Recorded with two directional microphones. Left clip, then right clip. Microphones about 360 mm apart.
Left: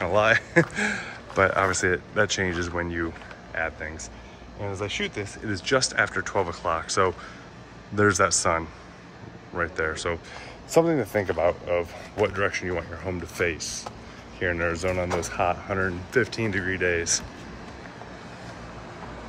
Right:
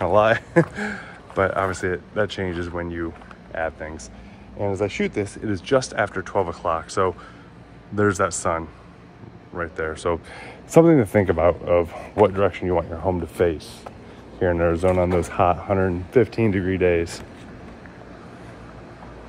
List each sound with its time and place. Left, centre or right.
0.0 s speech: centre
14.6 s speech: centre